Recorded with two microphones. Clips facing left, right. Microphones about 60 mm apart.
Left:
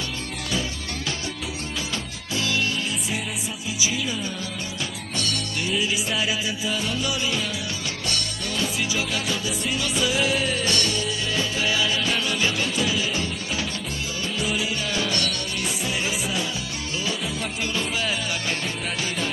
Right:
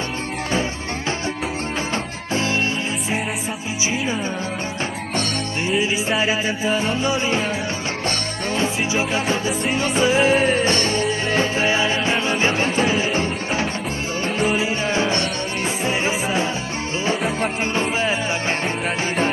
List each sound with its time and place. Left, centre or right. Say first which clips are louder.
2.3 s music: right 4 dB; right
5.1 s music: right 3 dB; right